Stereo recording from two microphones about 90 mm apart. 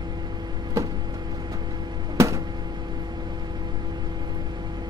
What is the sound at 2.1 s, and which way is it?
Music, 40° right (ahead or behind).